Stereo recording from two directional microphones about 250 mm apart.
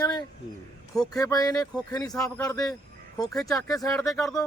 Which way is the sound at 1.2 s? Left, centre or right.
Centre.